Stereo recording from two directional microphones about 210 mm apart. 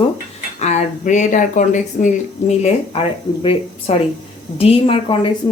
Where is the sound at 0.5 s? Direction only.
35° left (ahead or behind).